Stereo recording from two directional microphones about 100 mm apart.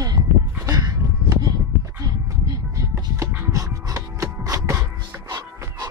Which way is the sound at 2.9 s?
30° right (ahead or behind).